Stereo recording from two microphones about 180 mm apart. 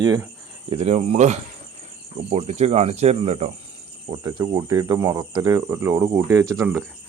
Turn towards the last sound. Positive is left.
turn(degrees=-20)  # may be behind; listen again after turning